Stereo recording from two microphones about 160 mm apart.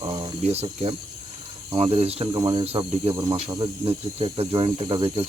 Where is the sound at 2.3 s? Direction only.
25° right (ahead or behind).